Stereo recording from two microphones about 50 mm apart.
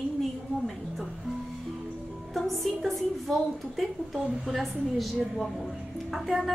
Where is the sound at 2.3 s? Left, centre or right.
Centre.